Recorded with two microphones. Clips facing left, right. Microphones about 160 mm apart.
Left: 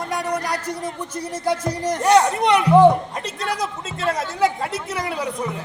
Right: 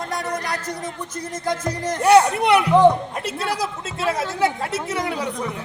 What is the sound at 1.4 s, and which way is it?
Speech, 10° left (ahead or behind).